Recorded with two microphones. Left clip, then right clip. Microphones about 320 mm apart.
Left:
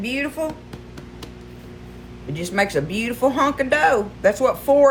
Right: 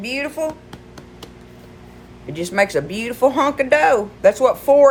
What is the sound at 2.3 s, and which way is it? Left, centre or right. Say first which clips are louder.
Speech: right 3 dB; right.